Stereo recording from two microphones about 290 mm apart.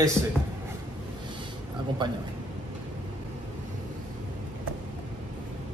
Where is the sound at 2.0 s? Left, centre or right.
Centre.